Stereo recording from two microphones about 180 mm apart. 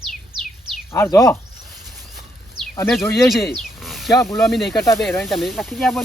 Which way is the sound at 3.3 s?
Centre (ahead or behind).